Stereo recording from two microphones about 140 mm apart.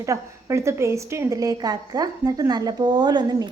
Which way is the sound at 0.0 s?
20° right (ahead or behind).